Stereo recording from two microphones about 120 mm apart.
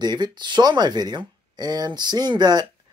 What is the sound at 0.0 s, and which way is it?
Speech, 35° right (ahead or behind).